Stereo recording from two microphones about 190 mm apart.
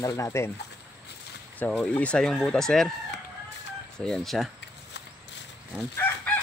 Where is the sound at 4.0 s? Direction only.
Centre (ahead or behind).